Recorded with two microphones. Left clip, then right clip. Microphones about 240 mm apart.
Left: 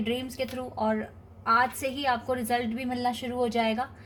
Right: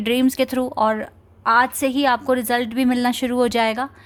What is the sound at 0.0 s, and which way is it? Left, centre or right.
A woman's voice, right.